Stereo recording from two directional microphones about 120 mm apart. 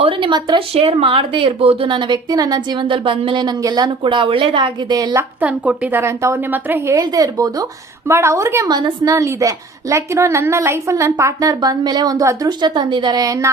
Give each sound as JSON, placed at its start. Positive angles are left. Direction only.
{"t": 0.0, "sound": "a sound", "side_deg": -40}
{"t": 0.7, "sound": "a woman's voice", "side_deg": -55}
{"t": 2.8, "sound": "a woman's voice", "side_deg": -45}
{"t": 5.4, "sound": "a woman's voice", "side_deg": -10}
{"t": 7.0, "sound": "a woman's voice", "side_deg": -30}